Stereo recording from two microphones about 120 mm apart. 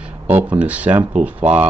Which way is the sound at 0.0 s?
10° right (ahead or behind).